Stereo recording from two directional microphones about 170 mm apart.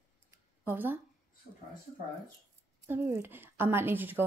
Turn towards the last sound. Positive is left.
turn(degrees=-10)  # may be behind; listen again after turning